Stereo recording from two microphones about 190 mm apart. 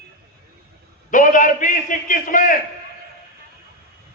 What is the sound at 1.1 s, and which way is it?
A man's voice, 45° left (ahead or behind).